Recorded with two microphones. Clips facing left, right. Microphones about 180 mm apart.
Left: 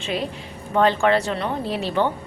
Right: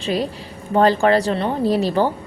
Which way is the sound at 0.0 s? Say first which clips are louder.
Right 4 dB; 35° right (ahead or behind).